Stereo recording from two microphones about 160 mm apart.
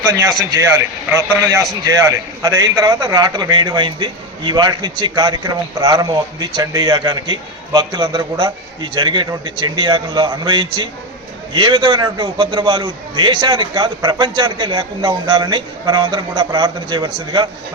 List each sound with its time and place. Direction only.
0.8 s a man's voice: 15° right (ahead or behind)